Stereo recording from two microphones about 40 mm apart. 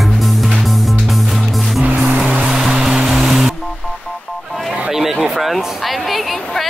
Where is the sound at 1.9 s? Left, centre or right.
Right.